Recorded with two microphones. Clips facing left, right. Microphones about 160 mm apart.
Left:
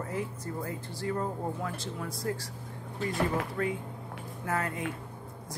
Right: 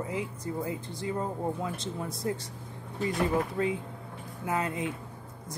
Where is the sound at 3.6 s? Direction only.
20° right (ahead or behind).